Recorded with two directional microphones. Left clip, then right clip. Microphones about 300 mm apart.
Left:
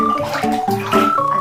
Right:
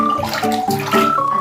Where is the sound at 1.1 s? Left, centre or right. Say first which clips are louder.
Even; centre.